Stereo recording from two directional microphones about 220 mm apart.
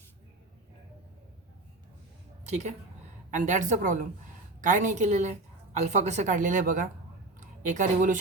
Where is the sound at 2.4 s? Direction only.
30° right (ahead or behind).